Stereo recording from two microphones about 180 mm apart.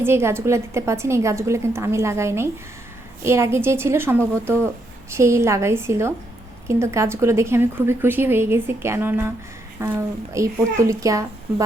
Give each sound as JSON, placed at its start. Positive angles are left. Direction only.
{"t": 0.0, "sound": "a woman's voice", "side_deg": -15}